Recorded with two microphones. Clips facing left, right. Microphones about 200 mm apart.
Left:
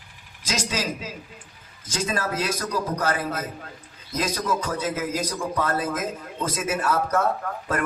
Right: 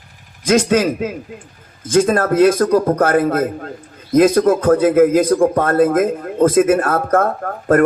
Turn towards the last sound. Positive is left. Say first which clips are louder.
# right 13 dB
turn(degrees=-55)  # may be behind; listen again after turning